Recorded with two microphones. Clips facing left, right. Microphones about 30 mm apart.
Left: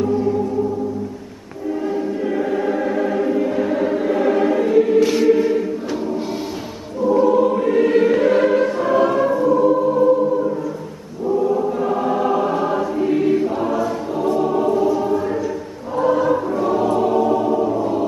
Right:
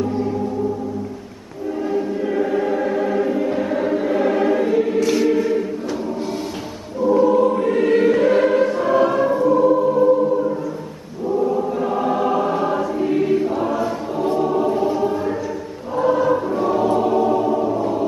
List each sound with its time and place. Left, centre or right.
1.9 s choir: centre
5.0 s music: centre
7.1 s choir: centre
14.7 s choir: right
15.0 s choir: centre
16.0 s choir: centre